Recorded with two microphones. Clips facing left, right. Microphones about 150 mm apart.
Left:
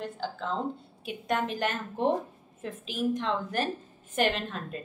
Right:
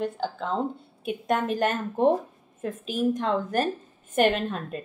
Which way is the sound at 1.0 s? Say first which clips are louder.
Right 4 dB; 50° right (ahead or behind).